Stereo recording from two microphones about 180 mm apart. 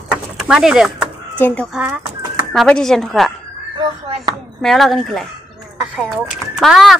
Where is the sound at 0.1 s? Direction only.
5° right (ahead or behind).